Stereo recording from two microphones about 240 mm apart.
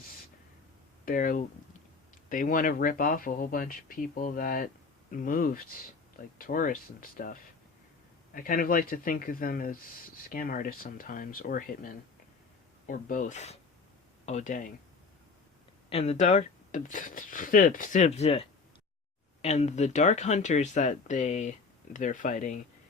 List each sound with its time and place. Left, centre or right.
1.0 s speech: left
12.9 s speech: left
15.9 s speech: left